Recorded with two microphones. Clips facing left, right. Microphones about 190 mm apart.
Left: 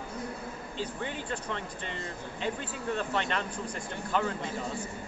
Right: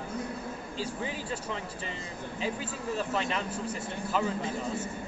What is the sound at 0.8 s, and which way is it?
A man's voice, 5° right (ahead or behind).